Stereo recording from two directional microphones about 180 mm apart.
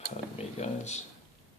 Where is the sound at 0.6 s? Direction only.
40° left (ahead or behind).